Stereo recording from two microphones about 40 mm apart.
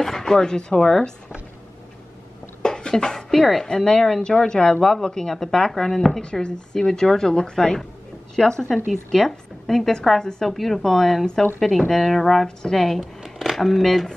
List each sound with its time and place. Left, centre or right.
0.0 s speech: centre
2.6 s a sound: centre
3.3 s speech: centre
8.6 s a woman's voice: centre
12.4 s a woman's voice: centre
13.0 s a sound: centre
13.6 s a woman's voice: centre